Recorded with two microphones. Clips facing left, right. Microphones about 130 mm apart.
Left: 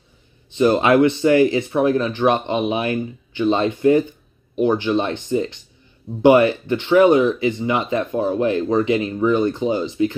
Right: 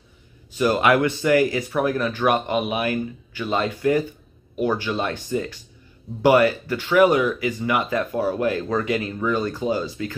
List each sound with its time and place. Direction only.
0.5 s speech: 25° left (ahead or behind)